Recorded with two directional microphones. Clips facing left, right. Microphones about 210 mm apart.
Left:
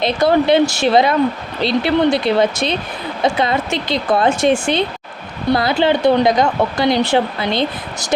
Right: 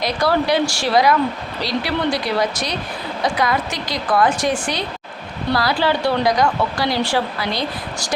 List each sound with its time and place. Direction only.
0.0 s speech: 25° left (ahead or behind)